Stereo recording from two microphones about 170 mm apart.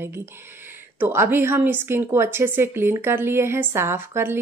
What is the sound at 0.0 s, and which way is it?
Speech, 15° right (ahead or behind).